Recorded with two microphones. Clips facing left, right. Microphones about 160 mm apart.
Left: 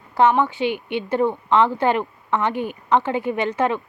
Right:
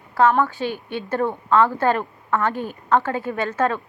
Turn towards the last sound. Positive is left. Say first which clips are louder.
# left 1 dB
turn(degrees=15)  # may be behind; listen again after turning